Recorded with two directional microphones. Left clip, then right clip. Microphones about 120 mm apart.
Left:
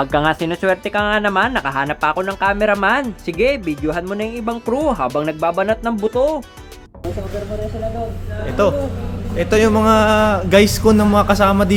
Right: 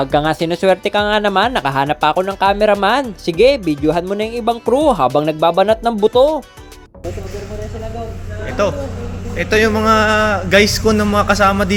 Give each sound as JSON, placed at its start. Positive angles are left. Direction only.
{"t": 0.0, "sound": "speech", "side_deg": -20}
{"t": 9.3, "sound": "a man's voice", "side_deg": 35}